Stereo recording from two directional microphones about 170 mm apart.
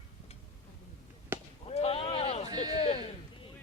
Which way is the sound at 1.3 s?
15° right (ahead or behind).